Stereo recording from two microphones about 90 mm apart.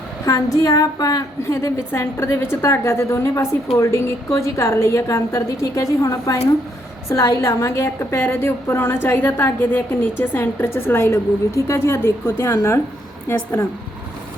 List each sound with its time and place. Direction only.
0.3 s a woman's voice: 40° left (ahead or behind)
1.5 s a woman's voice: 30° left (ahead or behind)